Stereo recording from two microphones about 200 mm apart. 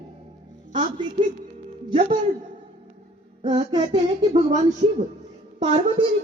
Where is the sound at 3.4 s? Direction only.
25° right (ahead or behind).